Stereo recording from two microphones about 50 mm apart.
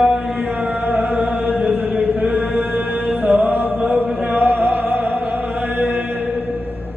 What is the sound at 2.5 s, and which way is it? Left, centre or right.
Mantra, right.